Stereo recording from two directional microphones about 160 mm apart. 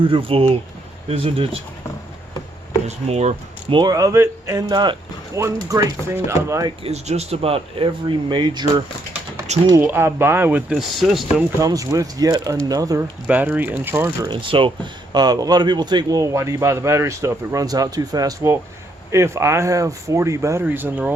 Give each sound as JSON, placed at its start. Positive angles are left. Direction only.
{"t": 0.0, "sound": "speech", "side_deg": -35}
{"t": 2.8, "sound": "speech", "side_deg": -45}
{"t": 3.8, "sound": "a man's voice", "side_deg": -25}
{"t": 6.8, "sound": "a man's voice", "side_deg": -40}
{"t": 9.5, "sound": "speech", "side_deg": -45}
{"t": 9.8, "sound": "speech", "side_deg": -15}
{"t": 11.6, "sound": "a man's voice", "side_deg": -20}
{"t": 13.2, "sound": "speech", "side_deg": -10}
{"t": 14.3, "sound": "a man's voice", "side_deg": -30}